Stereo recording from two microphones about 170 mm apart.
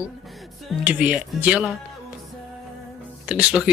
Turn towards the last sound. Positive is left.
turn(degrees=-5)  # may be behind; listen again after turning